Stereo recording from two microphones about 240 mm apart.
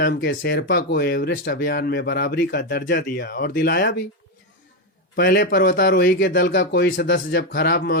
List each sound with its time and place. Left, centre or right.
0.0 s speech: left
5.1 s speech: left